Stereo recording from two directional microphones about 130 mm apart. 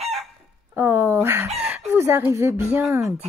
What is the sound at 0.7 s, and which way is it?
Speech, 20° right (ahead or behind).